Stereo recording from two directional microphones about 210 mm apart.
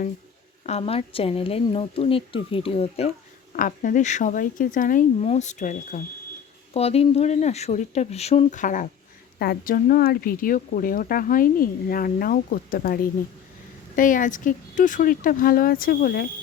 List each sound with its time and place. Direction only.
0.6 s speech: 30° left (ahead or behind)
3.5 s speech: 40° left (ahead or behind)